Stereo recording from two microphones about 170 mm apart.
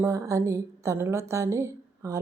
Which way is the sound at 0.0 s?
20° right (ahead or behind).